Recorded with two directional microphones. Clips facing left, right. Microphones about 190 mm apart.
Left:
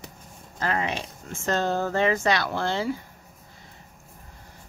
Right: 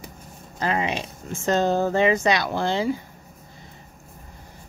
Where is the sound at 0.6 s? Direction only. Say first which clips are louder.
Right 3 dB; 15° right (ahead or behind).